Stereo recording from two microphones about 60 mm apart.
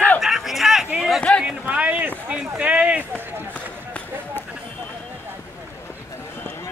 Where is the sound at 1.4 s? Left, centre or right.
Right.